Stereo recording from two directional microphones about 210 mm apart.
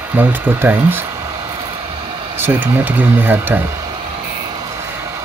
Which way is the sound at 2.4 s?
10° right (ahead or behind).